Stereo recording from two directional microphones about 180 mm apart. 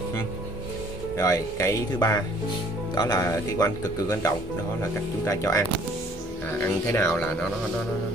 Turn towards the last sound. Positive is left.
turn(degrees=15)  # may be behind; listen again after turning